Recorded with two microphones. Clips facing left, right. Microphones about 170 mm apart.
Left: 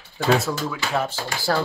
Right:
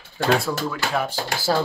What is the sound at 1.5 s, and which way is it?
Speech, 15° right (ahead or behind).